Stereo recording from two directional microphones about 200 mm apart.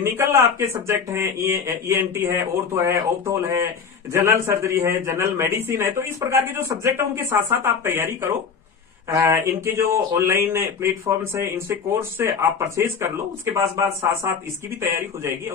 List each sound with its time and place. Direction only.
0.0 s a man's voice: 15° right (ahead or behind)